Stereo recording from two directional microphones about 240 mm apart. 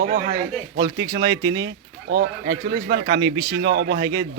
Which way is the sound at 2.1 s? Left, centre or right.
Right.